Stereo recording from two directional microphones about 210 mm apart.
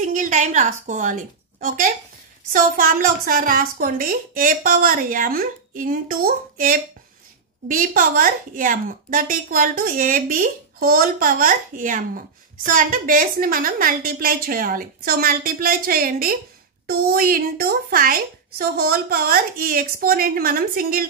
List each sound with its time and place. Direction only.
0.0 s a woman's voice: 35° right (ahead or behind)